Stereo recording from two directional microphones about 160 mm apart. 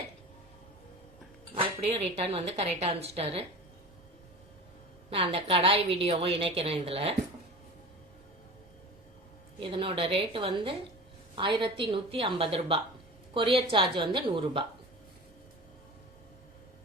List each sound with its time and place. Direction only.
1.9 s a woman's voice: 40° right (ahead or behind)
5.1 s a woman's voice: 35° right (ahead or behind)
9.6 s a woman's voice: 35° right (ahead or behind)